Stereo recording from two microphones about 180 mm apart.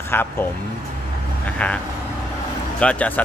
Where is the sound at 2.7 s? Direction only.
5° left (ahead or behind).